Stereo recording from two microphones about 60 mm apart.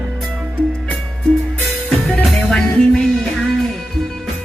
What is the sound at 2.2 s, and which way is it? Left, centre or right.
Music, centre.